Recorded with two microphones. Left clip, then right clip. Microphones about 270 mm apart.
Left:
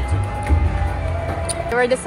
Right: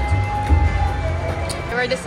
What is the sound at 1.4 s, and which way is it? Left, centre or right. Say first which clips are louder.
Music: left 5 dB; left.